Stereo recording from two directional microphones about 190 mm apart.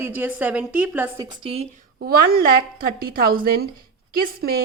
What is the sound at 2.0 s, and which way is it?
A woman's voice, 50° right (ahead or behind).